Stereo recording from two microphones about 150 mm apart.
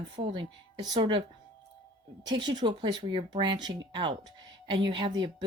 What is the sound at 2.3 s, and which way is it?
Speech, 30° right (ahead or behind).